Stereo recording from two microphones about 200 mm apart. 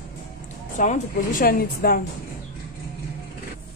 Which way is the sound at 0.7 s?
40° left (ahead or behind).